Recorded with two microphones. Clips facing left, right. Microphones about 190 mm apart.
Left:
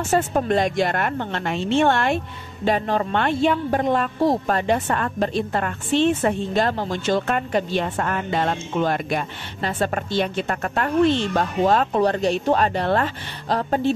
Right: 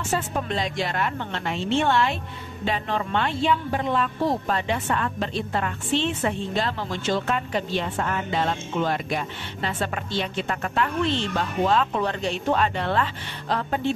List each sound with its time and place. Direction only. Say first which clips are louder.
0.1 s a woman's voice: left 7 dB; 45° left (ahead or behind)